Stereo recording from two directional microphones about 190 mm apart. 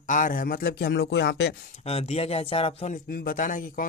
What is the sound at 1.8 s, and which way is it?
Speech, 35° left (ahead or behind).